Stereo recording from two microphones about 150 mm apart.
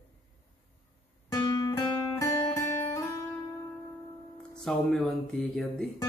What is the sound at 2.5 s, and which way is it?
Music, 15° left (ahead or behind).